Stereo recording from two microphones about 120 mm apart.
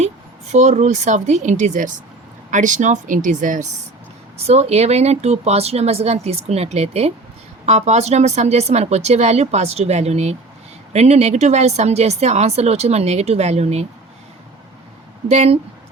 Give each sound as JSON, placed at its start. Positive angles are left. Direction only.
{"t": 0.0, "sound": "speech", "side_deg": -70}
{"t": 4.4, "sound": "speech", "side_deg": -60}
{"t": 15.3, "sound": "speech", "side_deg": -60}